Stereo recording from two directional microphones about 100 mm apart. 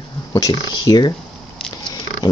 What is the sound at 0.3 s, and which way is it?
Speech, 40° left (ahead or behind).